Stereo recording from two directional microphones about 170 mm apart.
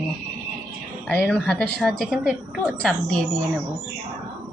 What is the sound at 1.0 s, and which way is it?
A woman's voice, 10° left (ahead or behind).